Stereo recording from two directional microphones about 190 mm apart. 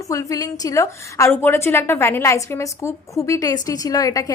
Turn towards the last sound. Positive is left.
turn(degrees=20)  # may be behind; listen again after turning